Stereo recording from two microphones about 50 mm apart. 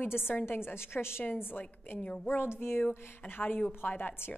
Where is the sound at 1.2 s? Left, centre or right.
Left.